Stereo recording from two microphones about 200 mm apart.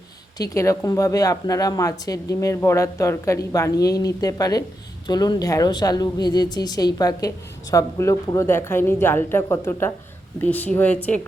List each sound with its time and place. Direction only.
0.3 s speech: 15° left (ahead or behind)